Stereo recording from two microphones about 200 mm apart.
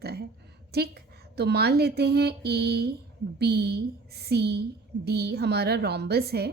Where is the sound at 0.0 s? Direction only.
55° right (ahead or behind).